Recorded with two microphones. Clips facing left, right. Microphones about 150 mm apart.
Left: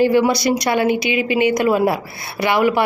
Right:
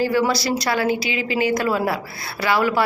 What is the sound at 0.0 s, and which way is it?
A woman's voice, 20° left (ahead or behind).